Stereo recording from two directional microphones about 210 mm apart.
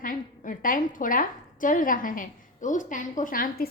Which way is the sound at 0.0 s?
40° left (ahead or behind).